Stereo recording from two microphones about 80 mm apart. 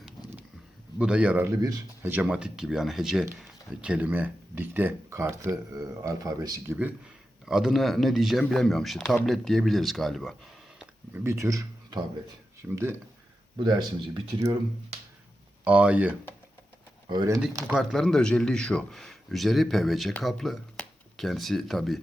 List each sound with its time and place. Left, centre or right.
0.9 s speech: centre
1.5 s speech: right
2.2 s speech: centre
3.8 s speech: centre; by 6.5 s right
6.7 s speech: right
7.4 s speech: centre
11.1 s speech: right
12.6 s speech: right
13.6 s speech: right
15.6 s speech: centre
17.7 s speech: centre